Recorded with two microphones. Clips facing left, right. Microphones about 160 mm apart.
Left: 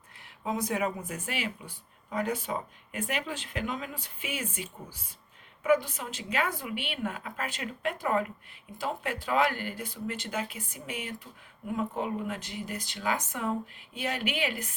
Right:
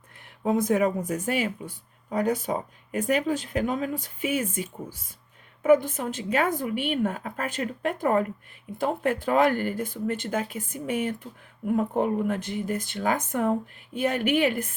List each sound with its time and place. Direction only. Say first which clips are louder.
0.5 s speech: right 8 dB; 50° right (ahead or behind)